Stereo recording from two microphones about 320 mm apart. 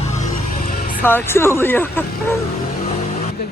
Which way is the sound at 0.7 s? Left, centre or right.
Left.